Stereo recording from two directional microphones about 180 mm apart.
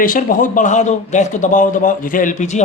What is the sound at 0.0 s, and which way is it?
A man's voice, 50° left (ahead or behind).